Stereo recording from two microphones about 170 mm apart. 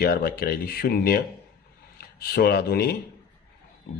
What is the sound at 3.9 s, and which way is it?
Speech, 40° left (ahead or behind).